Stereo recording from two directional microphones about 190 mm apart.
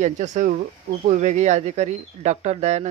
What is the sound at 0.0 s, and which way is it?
Speech, 40° right (ahead or behind).